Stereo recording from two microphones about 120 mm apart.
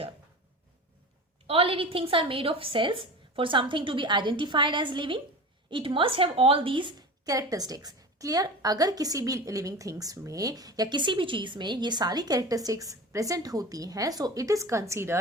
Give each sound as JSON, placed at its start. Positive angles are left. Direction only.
{"t": 1.5, "sound": "a woman's voice", "side_deg": -50}
{"t": 7.3, "sound": "a woman's voice", "side_deg": -30}